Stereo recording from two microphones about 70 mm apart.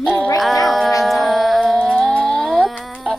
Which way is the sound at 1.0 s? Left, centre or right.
Centre.